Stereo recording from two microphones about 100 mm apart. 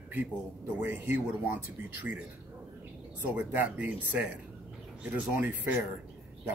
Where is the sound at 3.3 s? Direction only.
15° right (ahead or behind).